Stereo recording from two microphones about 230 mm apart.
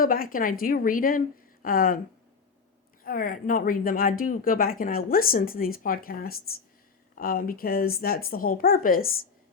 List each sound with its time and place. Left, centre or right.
0.0 s a woman's voice: left
3.0 s a woman's voice: left